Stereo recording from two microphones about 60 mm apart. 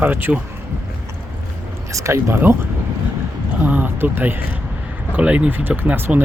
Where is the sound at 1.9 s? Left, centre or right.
Right.